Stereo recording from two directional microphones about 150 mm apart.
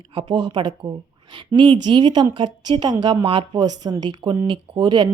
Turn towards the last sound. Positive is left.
turn(degrees=-30)  # may be behind; listen again after turning